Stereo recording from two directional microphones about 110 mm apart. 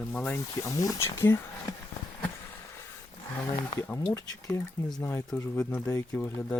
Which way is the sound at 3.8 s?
20° left (ahead or behind).